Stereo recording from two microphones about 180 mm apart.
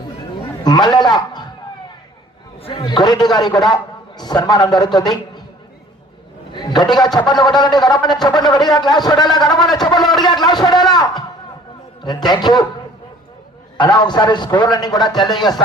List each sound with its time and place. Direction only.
0.6 s a man's voice: 25° left (ahead or behind)
2.6 s a man's voice: 35° left (ahead or behind)
6.5 s a man's voice: 25° left (ahead or behind)
13.7 s a man's voice: 25° left (ahead or behind)